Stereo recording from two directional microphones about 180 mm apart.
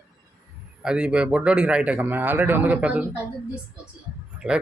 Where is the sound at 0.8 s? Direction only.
5° right (ahead or behind).